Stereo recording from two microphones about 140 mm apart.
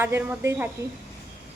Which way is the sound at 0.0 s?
15° right (ahead or behind).